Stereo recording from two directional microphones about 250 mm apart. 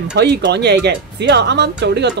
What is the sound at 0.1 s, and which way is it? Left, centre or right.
Speech, right.